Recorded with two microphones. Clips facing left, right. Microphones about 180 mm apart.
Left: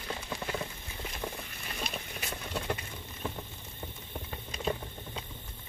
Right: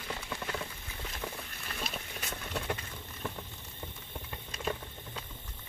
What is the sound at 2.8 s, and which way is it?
Patter, 15° left (ahead or behind).